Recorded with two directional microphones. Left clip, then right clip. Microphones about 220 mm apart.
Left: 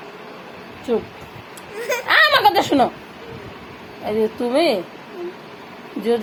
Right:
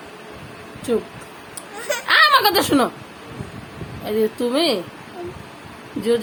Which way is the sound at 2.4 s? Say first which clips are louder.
Left 2 dB; 20° right (ahead or behind).